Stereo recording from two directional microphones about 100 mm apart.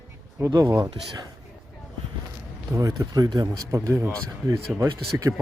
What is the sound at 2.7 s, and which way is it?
Speech, 30° right (ahead or behind).